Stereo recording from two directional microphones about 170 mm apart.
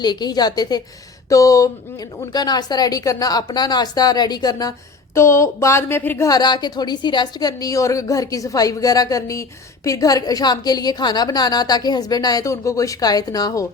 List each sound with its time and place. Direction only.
0.0 s a woman's voice: 25° left (ahead or behind)